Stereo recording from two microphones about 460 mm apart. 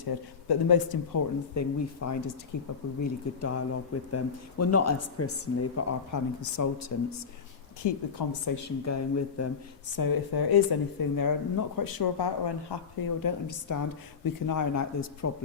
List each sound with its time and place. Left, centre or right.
0.0 s a man's voice: left
9.9 s a man's voice: left